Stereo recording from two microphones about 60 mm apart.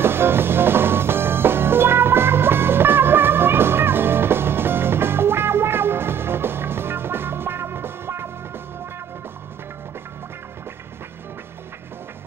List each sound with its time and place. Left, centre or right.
0.0 s music: right